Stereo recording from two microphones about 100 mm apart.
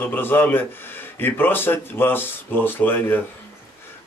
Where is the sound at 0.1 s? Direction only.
20° left (ahead or behind).